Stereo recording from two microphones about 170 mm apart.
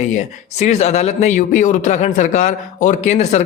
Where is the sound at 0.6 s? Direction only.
40° left (ahead or behind).